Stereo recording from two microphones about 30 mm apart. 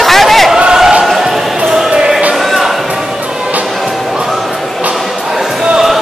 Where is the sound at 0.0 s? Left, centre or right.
Centre.